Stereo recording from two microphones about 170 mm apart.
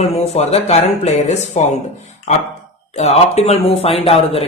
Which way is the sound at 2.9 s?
40° left (ahead or behind).